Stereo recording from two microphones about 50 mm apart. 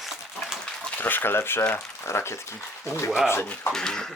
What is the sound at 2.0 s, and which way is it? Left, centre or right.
Speech, left.